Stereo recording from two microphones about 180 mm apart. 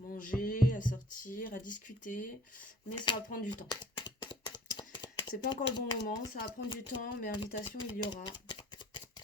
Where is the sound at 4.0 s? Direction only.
25° left (ahead or behind).